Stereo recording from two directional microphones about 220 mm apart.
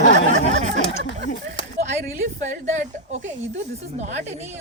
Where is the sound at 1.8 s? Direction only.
35° right (ahead or behind).